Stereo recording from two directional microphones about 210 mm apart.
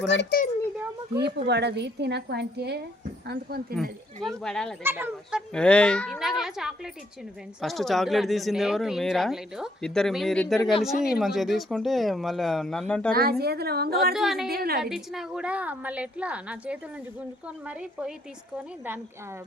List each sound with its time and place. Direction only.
0.0 s a child's voice: 55° left (ahead or behind)
1.1 s a woman's voice: 55° right (ahead or behind)
4.2 s speech: centre (ahead or behind)
4.8 s speech: 10° right (ahead or behind)
5.5 s speech: 5° left (ahead or behind)
10.6 s speech: 25° left (ahead or behind)
11.2 s speech: centre (ahead or behind)
13.4 s a woman's voice: 50° right (ahead or behind)
14.1 s speech: centre (ahead or behind)
14.5 s a woman's voice: 45° right (ahead or behind)
14.8 s speech: centre (ahead or behind)